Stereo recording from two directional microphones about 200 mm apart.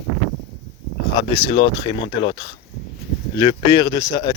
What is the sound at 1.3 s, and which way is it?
Speech, 25° left (ahead or behind).